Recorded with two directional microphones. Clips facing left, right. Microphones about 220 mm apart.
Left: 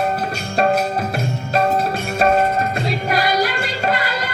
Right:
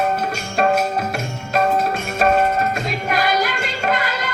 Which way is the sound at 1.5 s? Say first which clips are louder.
Even; 35° left (ahead or behind).